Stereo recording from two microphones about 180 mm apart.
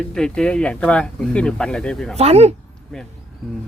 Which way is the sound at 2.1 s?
35° right (ahead or behind).